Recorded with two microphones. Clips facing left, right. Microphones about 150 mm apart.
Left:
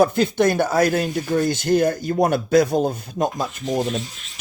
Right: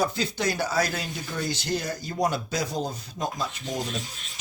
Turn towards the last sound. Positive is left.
turn(degrees=55)  # may be behind; listen again after turning